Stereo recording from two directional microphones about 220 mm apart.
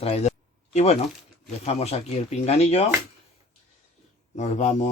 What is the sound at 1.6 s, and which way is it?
Speech, 25° left (ahead or behind).